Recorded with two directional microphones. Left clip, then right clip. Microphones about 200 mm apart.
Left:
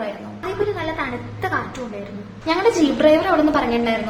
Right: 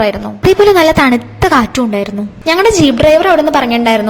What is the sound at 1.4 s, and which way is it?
A woman's voice, 45° right (ahead or behind).